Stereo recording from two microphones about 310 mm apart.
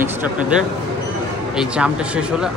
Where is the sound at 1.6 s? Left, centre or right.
Centre.